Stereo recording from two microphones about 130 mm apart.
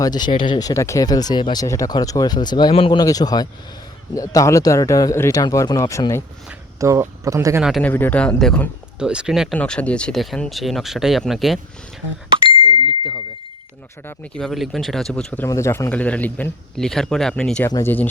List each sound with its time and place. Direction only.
0.0 s speech: 35° left (ahead or behind)
0.6 s speech: 25° left (ahead or behind)
1.6 s speech: 25° left (ahead or behind); by 3.0 s 40° left (ahead or behind)
3.0 s speech: 30° left (ahead or behind)
6.7 s speech: 25° right (ahead or behind)
7.8 s speech: 15° left (ahead or behind)
9.0 s speech: 5° right (ahead or behind)
9.6 s speech: 10° left (ahead or behind)
14.3 s speech: centre (ahead or behind)
15.4 s speech: 20° left (ahead or behind)
15.9 s speech: 10° left (ahead or behind)